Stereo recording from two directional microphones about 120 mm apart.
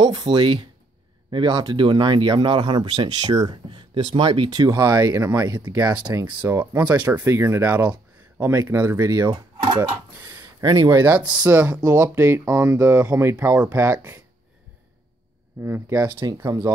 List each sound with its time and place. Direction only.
0.0 s speech: 35° right (ahead or behind)
6.4 s speech: 15° right (ahead or behind)
11.1 s speech: 10° right (ahead or behind)
11.8 s speech: 25° right (ahead or behind)
15.6 s speech: 25° right (ahead or behind)
16.1 s speech: 40° right (ahead or behind)